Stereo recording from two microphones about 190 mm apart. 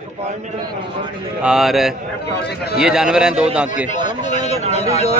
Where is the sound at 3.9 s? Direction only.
40° left (ahead or behind).